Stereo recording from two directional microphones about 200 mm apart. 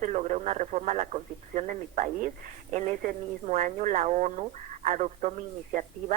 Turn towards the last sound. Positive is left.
turn(degrees=-35)  # may be behind; listen again after turning